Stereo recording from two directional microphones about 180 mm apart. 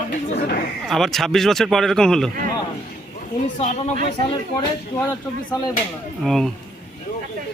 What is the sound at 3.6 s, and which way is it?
Speech, 40° left (ahead or behind).